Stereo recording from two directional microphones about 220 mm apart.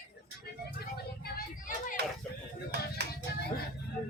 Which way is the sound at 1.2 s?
40° left (ahead or behind).